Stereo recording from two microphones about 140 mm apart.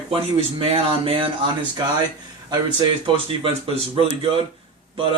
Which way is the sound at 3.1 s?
40° right (ahead or behind).